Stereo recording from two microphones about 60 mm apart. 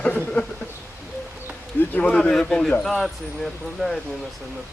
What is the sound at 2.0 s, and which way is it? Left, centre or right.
Speech, centre.